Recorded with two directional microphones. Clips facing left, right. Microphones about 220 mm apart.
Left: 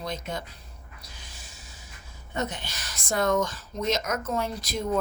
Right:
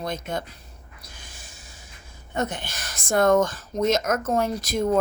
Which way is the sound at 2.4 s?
50° right (ahead or behind).